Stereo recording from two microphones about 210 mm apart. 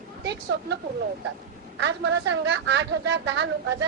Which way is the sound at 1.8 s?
55° right (ahead or behind).